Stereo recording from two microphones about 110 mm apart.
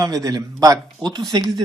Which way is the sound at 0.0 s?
35° right (ahead or behind).